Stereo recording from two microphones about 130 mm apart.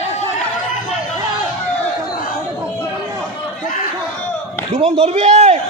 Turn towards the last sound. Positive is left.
turn(degrees=-55)  # may be behind; listen again after turning